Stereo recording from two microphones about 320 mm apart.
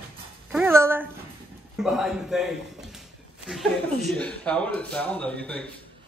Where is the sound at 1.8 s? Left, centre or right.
Centre.